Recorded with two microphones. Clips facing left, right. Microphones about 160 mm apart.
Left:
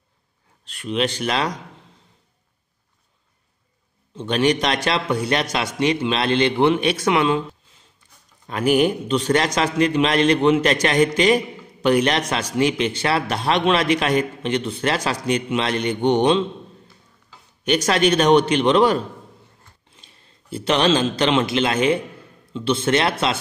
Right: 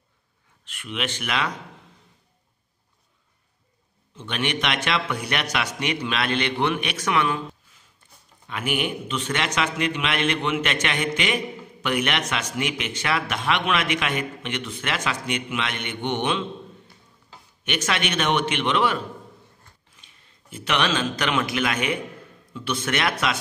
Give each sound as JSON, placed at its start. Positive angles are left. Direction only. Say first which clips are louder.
{"t": 0.7, "sound": "a man's voice", "louder": "left 8 dB", "side_deg": 35}
{"t": 4.1, "sound": "a man's voice", "louder": "left 9 dB", "side_deg": 35}
{"t": 8.5, "sound": "a man's voice", "louder": "left 9 dB", "side_deg": 40}
{"t": 17.6, "sound": "a man's voice", "louder": "left 9 dB", "side_deg": 35}